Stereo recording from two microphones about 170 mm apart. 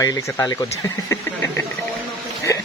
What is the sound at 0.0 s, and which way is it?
Speech, 20° left (ahead or behind).